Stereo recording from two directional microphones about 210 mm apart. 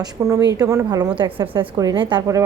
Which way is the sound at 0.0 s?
15° right (ahead or behind).